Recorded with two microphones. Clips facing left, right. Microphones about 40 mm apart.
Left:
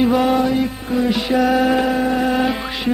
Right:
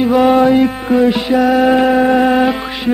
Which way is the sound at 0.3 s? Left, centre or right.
Right.